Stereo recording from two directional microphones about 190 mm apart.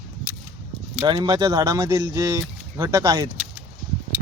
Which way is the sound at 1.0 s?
25° right (ahead or behind).